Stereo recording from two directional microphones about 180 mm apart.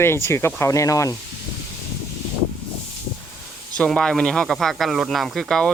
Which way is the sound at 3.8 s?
5° left (ahead or behind).